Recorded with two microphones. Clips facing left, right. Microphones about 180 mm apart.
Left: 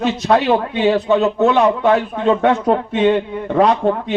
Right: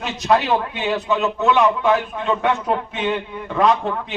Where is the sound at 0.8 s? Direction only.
35° left (ahead or behind).